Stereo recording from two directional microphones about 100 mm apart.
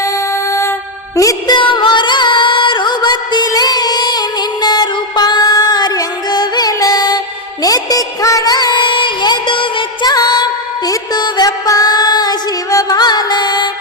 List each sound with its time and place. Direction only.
1.1 s music: 35° left (ahead or behind)
1.5 s music: 50° left (ahead or behind)